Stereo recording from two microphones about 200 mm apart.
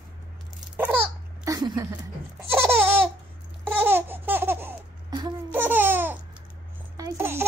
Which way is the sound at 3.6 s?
10° right (ahead or behind).